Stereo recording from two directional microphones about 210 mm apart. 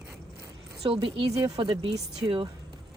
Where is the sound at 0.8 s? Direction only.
25° right (ahead or behind).